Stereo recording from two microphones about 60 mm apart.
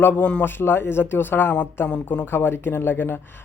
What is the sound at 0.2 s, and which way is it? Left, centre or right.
Speech, left.